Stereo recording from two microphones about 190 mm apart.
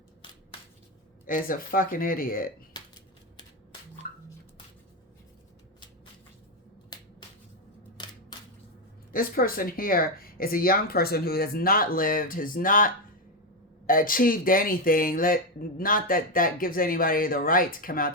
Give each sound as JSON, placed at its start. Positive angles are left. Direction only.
{"t": 1.3, "sound": "speech", "side_deg": 50}
{"t": 6.9, "sound": "finger snapping", "side_deg": 20}
{"t": 7.9, "sound": "a sound", "side_deg": 25}
{"t": 9.1, "sound": "speech", "side_deg": 50}